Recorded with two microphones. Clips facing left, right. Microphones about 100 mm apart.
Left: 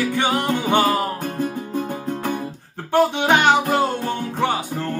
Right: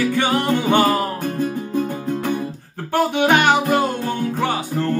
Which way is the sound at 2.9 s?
20° left (ahead or behind).